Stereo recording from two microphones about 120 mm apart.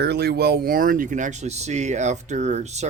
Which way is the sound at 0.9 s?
90° right.